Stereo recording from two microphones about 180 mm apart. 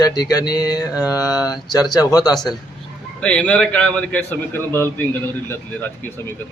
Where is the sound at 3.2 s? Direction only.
5° left (ahead or behind).